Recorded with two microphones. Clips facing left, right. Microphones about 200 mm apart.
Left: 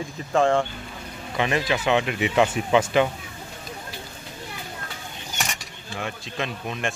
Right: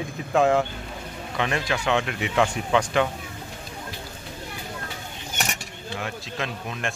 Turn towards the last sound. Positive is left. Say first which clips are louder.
# left 2 dB
turn(degrees=0)  # may be behind; listen again after turning